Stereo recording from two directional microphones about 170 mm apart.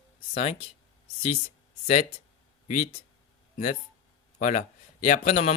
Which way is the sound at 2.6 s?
45° left (ahead or behind).